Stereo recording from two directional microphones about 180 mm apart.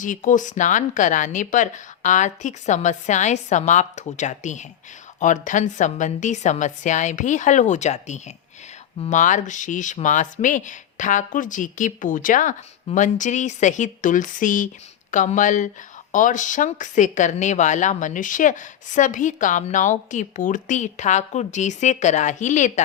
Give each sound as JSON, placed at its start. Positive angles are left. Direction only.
{"t": 0.0, "sound": "speech", "side_deg": 45}